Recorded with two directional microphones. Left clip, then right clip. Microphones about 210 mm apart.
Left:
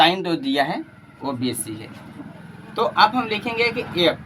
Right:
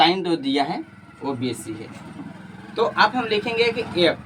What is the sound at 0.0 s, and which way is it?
Speech, 35° left (ahead or behind).